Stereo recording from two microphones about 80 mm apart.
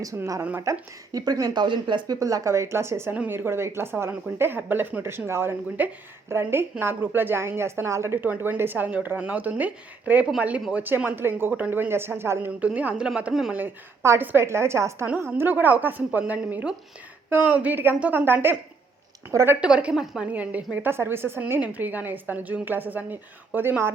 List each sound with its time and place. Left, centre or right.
0.6 s speech: right
1.2 s speech: right
2.1 s speech: right
12.5 s a woman's voice: centre
14.2 s speech: right
15.4 s speech: right
19.3 s speech: right
19.5 s a woman's voice: centre